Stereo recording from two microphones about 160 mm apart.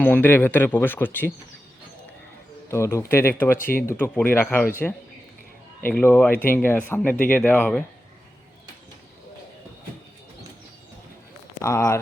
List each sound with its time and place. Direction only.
0.0 s speech: 15° left (ahead or behind)
2.6 s a man's voice: 15° left (ahead or behind)
11.6 s speech: 20° left (ahead or behind)